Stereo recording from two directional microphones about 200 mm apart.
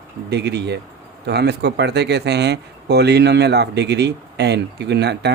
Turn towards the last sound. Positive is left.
turn(degrees=-55)  # may be behind; listen again after turning